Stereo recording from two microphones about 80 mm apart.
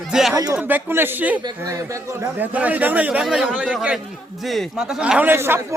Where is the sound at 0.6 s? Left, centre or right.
Right.